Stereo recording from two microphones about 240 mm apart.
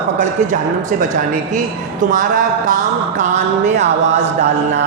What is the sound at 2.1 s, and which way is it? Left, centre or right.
Speech, right.